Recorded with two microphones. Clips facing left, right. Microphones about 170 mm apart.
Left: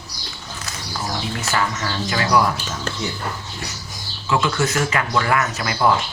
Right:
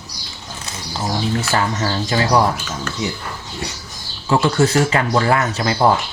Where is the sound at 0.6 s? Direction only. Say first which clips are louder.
Right 4 dB; 25° right (ahead or behind).